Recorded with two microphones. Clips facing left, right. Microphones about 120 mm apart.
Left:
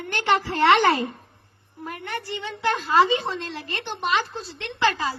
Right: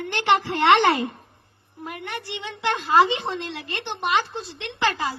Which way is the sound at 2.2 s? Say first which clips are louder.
Left 1 dB; 20° right (ahead or behind).